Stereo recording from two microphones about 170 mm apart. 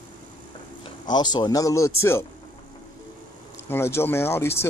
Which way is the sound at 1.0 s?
25° left (ahead or behind).